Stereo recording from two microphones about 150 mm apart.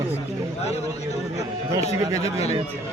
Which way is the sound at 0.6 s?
45° left (ahead or behind).